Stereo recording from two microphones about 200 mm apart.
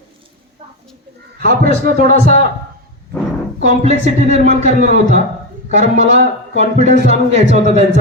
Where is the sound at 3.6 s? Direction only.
35° right (ahead or behind).